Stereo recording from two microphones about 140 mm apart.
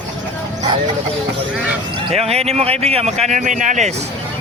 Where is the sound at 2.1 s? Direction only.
45° right (ahead or behind).